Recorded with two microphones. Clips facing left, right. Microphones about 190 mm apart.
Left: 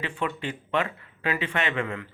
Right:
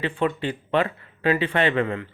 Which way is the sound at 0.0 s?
30° right (ahead or behind).